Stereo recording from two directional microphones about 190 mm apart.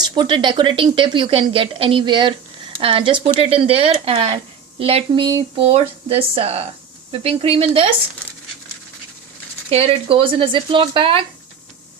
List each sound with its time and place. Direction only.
0.0 s speech: 25° right (ahead or behind)
9.6 s speech: 30° right (ahead or behind)